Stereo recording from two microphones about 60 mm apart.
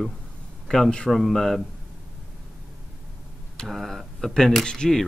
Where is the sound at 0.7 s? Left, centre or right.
Centre.